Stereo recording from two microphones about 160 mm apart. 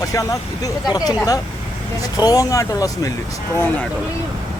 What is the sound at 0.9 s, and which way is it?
Speech, 25° left (ahead or behind).